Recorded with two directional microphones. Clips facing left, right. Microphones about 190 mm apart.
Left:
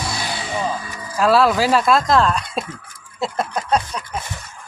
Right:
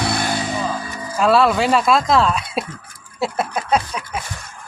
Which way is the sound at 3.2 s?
5° right (ahead or behind).